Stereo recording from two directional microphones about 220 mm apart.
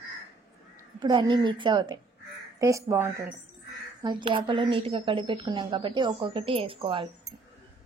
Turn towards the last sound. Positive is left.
turn(degrees=-25)  # may be behind; listen again after turning